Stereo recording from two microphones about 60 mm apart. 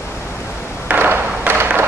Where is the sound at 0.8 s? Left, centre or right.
Right.